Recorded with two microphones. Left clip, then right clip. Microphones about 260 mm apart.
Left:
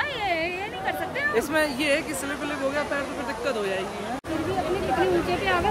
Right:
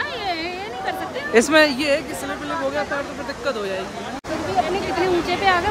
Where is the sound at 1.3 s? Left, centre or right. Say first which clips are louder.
Right 11 dB; right.